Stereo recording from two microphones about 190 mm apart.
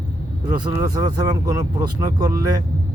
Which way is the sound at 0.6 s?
25° right (ahead or behind).